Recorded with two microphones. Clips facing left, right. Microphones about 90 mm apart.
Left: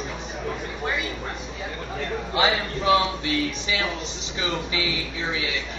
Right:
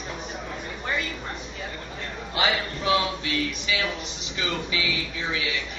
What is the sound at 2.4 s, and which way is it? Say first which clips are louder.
Speech: left 2 dB; 30° left (ahead or behind).